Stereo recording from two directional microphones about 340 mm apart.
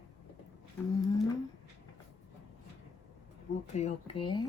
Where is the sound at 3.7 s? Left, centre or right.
Centre.